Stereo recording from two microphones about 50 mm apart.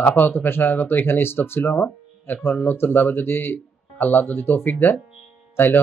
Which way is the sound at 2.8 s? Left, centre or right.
Left.